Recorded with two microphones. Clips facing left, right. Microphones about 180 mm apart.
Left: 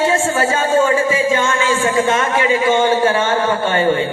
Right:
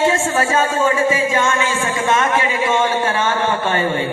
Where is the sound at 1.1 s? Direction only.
30° left (ahead or behind).